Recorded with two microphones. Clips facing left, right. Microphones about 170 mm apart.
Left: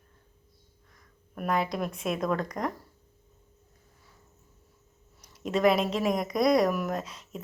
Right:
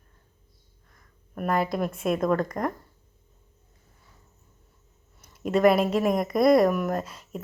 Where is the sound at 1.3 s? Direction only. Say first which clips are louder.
Right 3 dB; centre (ahead or behind).